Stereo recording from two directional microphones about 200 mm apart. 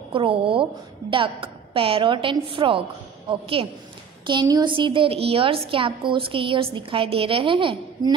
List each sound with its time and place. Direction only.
0.1 s a woman's voice: 25° right (ahead or behind)